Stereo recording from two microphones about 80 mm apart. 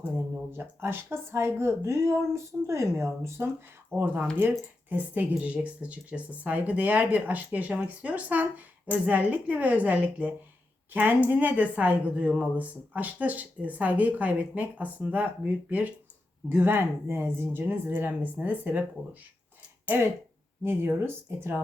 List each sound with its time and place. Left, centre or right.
0.5 s a woman's voice: right